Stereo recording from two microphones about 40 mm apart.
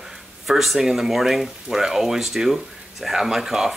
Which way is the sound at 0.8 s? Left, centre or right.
Centre.